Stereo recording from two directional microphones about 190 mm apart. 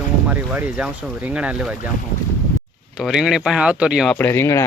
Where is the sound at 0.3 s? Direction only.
10° right (ahead or behind).